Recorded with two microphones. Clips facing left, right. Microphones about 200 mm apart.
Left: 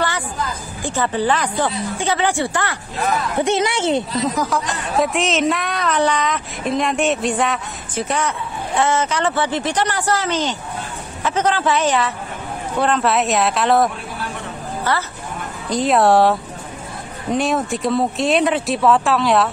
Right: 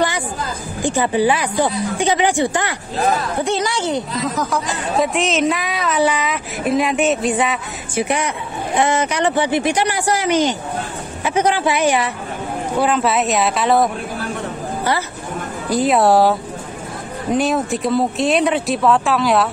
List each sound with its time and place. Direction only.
0.8 s speech: 15° right (ahead or behind)
3.4 s speech: 25° left (ahead or behind)
4.4 s a woman's voice: centre (ahead or behind)
15.7 s a woman's voice: centre (ahead or behind)